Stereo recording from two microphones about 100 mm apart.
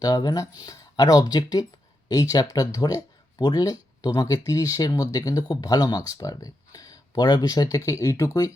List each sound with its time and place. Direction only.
0.0 s speech: 40° left (ahead or behind)